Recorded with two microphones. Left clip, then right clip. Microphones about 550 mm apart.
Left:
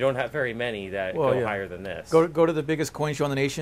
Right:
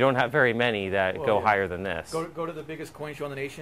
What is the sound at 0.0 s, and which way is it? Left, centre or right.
Speech, right.